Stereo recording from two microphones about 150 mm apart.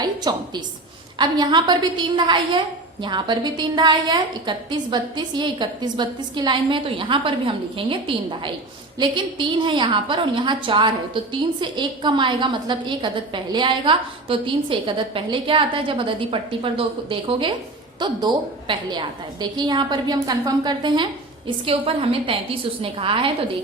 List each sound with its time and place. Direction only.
0.0 s a woman's voice: 30° right (ahead or behind)